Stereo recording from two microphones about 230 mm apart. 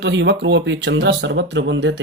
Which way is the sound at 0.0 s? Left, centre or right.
Right.